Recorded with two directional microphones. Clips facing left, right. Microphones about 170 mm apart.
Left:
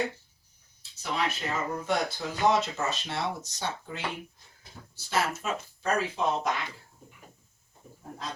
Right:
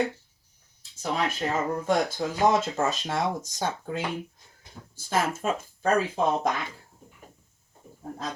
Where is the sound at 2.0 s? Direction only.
50° right (ahead or behind).